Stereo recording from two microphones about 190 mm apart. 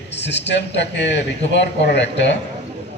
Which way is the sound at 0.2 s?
65° left (ahead or behind).